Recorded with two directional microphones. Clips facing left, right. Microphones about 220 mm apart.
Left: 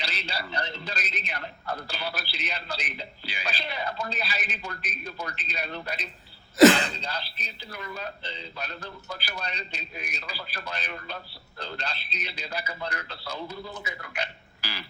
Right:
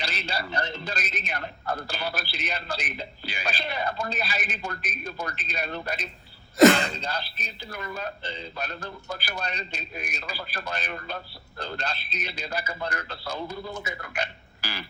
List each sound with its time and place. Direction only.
0.0 s a man's voice: 45° right (ahead or behind)